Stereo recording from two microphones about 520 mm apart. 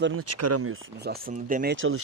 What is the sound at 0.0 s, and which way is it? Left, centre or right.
Speech, right.